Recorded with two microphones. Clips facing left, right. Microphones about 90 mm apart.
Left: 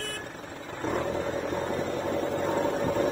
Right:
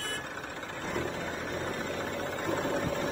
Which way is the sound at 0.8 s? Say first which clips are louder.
Left 6 dB; 50° left (ahead or behind).